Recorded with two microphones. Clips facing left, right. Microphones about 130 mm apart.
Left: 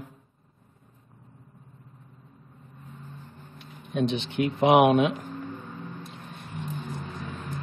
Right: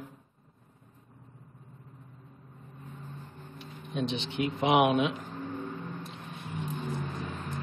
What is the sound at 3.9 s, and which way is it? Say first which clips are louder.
Speech: left 5 dB; 55° left (ahead or behind).